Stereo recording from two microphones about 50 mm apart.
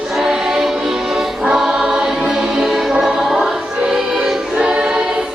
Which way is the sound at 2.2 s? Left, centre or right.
Centre.